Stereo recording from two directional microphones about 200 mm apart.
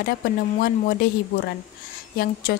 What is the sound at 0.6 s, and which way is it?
A woman's voice, 45° left (ahead or behind).